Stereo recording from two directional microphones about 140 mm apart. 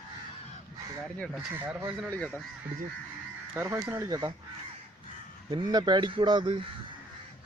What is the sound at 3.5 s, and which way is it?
Speech, 20° right (ahead or behind).